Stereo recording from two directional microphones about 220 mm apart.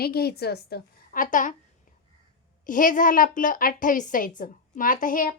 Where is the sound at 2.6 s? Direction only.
35° left (ahead or behind).